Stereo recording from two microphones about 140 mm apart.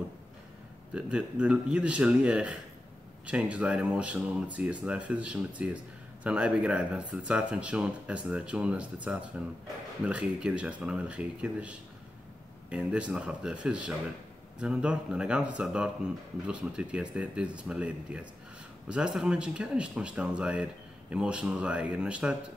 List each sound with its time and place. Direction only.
0.9 s speech: 5° right (ahead or behind)